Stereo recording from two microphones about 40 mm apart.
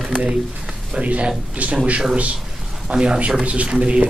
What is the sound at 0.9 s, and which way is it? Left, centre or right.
Speech, right.